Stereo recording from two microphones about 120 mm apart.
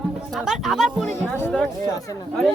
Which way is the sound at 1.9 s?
30° left (ahead or behind).